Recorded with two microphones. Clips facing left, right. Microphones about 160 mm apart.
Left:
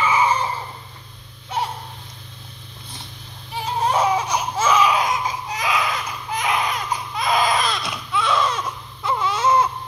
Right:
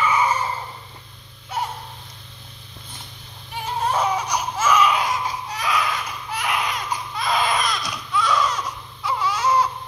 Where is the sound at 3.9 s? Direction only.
25° left (ahead or behind).